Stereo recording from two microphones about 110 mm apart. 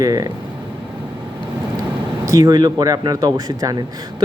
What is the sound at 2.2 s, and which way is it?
Speech, 30° right (ahead or behind).